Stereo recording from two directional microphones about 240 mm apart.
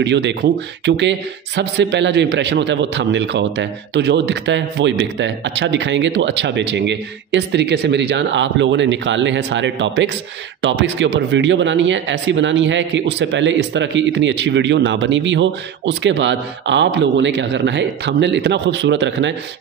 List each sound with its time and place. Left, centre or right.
0.0 s speech: right